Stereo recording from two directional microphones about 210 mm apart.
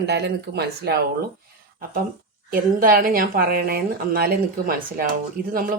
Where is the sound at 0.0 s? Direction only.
50° right (ahead or behind).